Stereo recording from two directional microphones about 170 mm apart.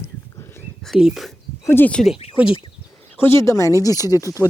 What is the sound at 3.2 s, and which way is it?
Speech, 15° left (ahead or behind).